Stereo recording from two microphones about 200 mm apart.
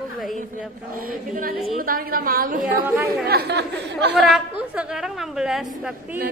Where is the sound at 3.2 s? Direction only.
55° right (ahead or behind).